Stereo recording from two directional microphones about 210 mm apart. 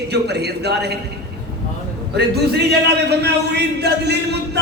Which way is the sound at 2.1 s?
50° right (ahead or behind).